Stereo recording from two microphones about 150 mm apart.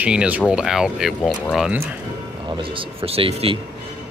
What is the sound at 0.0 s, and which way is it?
Speech, 10° right (ahead or behind).